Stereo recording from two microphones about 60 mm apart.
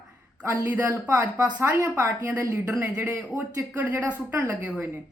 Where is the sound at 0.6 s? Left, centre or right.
Right.